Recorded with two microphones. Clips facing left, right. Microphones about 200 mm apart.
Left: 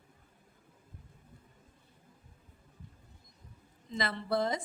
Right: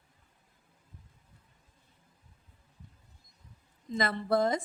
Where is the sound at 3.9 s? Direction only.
45° right (ahead or behind).